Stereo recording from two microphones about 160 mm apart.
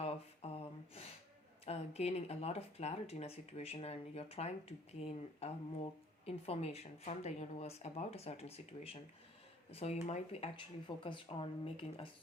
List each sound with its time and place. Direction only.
0.0 s a sound: 35° left (ahead or behind)
1.6 s speech: 40° left (ahead or behind)
10.8 s speech: 35° left (ahead or behind)